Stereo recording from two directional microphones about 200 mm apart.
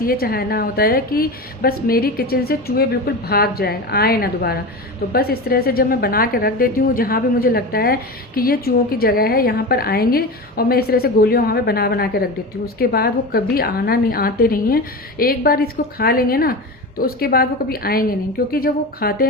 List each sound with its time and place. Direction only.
0.0 s a woman's voice: 50° left (ahead or behind)